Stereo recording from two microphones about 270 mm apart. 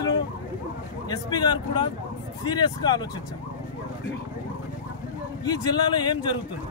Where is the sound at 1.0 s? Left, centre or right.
Centre.